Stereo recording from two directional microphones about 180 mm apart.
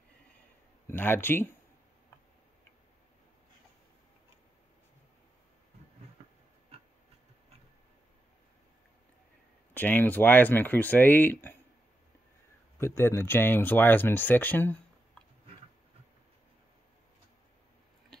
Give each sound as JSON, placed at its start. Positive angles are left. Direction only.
{"t": 0.8, "sound": "speech", "side_deg": 10}
{"t": 9.8, "sound": "speech", "side_deg": 10}
{"t": 12.7, "sound": "speech", "side_deg": 15}